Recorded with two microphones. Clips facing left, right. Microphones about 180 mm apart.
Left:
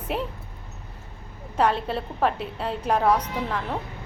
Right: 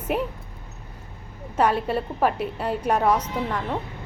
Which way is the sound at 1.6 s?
5° right (ahead or behind).